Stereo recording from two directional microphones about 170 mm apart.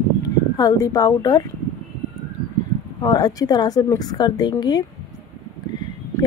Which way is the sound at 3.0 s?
25° left (ahead or behind).